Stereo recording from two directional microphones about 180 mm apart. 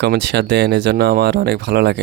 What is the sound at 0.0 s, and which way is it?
Speech, 70° right (ahead or behind).